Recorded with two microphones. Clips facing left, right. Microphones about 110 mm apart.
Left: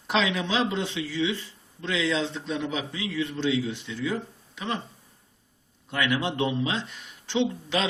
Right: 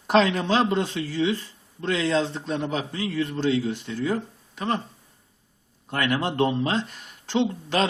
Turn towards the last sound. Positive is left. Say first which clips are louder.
# right 3 dB
turn(degrees=-45)  # may be behind; listen again after turning